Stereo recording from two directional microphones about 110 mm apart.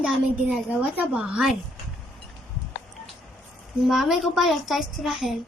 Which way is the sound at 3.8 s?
5° right (ahead or behind).